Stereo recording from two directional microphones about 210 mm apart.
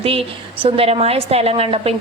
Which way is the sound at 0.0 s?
25° right (ahead or behind).